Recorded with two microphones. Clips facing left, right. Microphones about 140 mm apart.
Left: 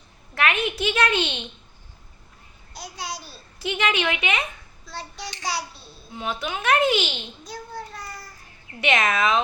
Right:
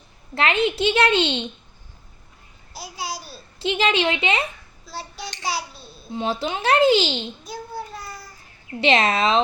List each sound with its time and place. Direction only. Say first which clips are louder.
0.3 s speech: right 4 dB; 25° right (ahead or behind)
2.7 s a child's voice: right 3 dB; 5° right (ahead or behind)
3.6 s speech: right 4 dB; 25° right (ahead or behind)
4.9 s child singing: right 2 dB; 5° right (ahead or behind)
5.4 s a child's voice: right 2 dB; centre (ahead or behind)
6.1 s speech: right 5 dB; 30° right (ahead or behind)
7.4 s child singing: right 3 dB; 5° right (ahead or behind)
8.8 s speech: right 3 dB; 30° right (ahead or behind)